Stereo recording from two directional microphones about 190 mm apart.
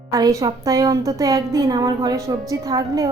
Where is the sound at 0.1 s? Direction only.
20° right (ahead or behind).